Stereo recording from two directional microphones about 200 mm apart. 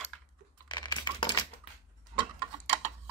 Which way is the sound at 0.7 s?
20° left (ahead or behind).